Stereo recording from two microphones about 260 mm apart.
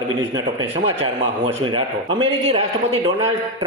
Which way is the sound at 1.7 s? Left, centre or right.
Centre.